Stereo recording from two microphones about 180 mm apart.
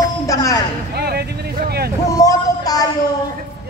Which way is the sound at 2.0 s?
20° left (ahead or behind).